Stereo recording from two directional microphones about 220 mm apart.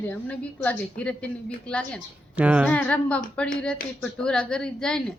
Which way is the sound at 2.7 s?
5° left (ahead or behind).